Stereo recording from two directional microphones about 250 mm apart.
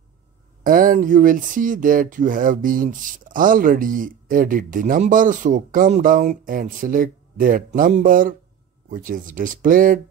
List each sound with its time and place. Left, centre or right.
0.7 s speech: right